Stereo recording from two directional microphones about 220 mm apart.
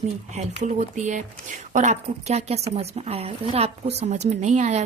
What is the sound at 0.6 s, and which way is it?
A woman's voice, 35° right (ahead or behind).